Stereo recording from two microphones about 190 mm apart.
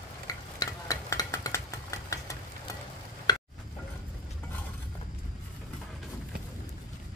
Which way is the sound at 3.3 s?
20° left (ahead or behind).